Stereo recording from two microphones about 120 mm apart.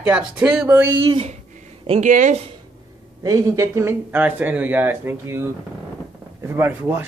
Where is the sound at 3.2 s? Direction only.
30° right (ahead or behind).